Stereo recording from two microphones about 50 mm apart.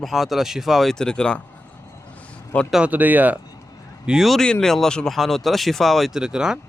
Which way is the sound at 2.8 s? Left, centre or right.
Right.